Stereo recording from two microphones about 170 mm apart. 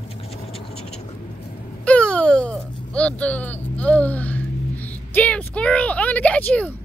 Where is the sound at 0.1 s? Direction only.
35° left (ahead or behind).